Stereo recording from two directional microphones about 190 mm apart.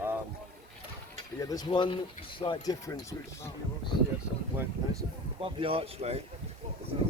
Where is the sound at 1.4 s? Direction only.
20° left (ahead or behind).